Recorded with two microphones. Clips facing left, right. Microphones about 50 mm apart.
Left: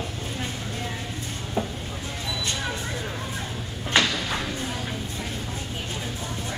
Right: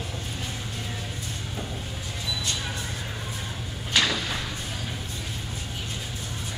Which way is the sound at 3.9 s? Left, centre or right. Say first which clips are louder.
Left 2 dB; left.